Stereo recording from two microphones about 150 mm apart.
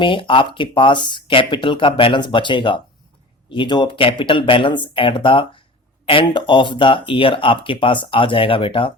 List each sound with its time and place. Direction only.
0.0 s speech: 35° left (ahead or behind)